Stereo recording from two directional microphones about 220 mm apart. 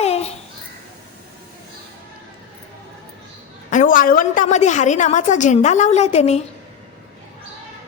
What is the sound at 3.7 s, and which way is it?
A woman's voice, 35° left (ahead or behind).